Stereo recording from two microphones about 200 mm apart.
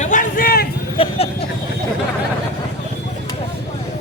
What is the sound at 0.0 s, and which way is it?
Vehicle, 40° left (ahead or behind).